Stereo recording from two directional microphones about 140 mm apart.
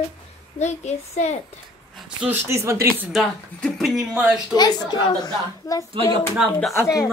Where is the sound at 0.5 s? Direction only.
55° left (ahead or behind).